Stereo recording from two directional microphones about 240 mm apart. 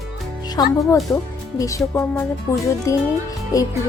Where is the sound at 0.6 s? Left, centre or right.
Centre.